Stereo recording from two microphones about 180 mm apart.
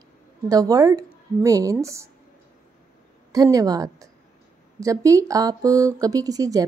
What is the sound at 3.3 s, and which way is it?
Speech, 20° right (ahead or behind).